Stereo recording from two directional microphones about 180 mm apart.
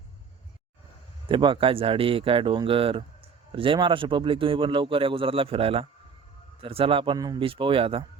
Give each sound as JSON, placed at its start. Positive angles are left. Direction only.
{"t": 1.3, "sound": "a man's voice", "side_deg": -25}